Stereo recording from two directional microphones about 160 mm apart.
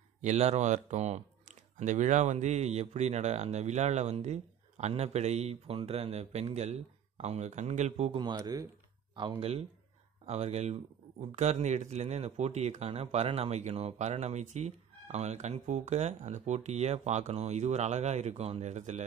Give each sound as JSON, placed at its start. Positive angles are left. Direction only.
{"t": 0.2, "sound": "speech", "side_deg": -45}
{"t": 8.2, "sound": "speech", "side_deg": -25}
{"t": 9.4, "sound": "speech", "side_deg": -40}